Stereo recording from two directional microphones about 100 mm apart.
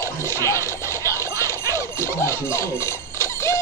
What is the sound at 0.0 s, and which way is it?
Scratch, 25° left (ahead or behind).